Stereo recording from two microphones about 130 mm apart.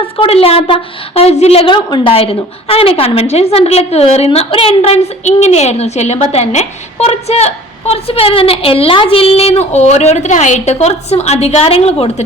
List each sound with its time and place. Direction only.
0.0 s a woman's voice: 45° left (ahead or behind)
1.7 s a woman's voice: 40° left (ahead or behind)